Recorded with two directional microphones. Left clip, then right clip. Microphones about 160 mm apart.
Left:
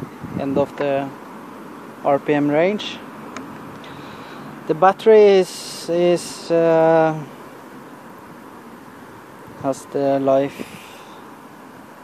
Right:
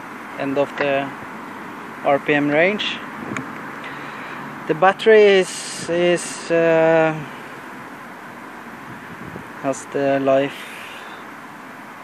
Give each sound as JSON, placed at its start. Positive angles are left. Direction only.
{"t": 0.4, "sound": "speech", "side_deg": 25}
{"t": 2.0, "sound": "speech", "side_deg": 25}
{"t": 4.6, "sound": "speech", "side_deg": 25}
{"t": 9.7, "sound": "speech", "side_deg": 20}